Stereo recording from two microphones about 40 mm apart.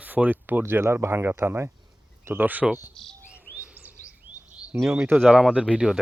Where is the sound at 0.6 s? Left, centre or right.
Right.